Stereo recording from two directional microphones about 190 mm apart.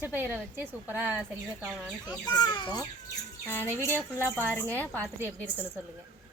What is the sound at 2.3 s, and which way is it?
Speech, 20° left (ahead or behind).